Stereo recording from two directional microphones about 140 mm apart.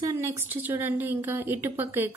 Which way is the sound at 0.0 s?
15° right (ahead or behind).